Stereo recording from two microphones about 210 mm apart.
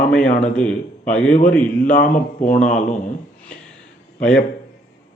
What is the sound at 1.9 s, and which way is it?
Speech, 40° left (ahead or behind).